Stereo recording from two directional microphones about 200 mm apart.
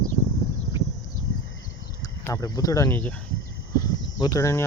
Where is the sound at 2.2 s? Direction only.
15° left (ahead or behind).